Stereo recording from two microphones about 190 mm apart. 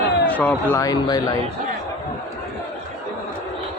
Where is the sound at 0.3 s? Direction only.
10° left (ahead or behind).